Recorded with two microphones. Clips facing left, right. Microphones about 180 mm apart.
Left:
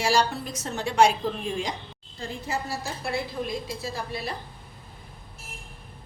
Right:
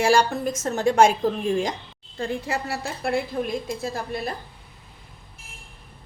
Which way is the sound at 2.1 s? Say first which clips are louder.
Right 5 dB; 65° right (ahead or behind).